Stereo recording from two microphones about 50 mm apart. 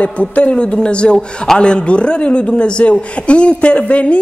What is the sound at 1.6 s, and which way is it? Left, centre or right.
A woman's voice, left.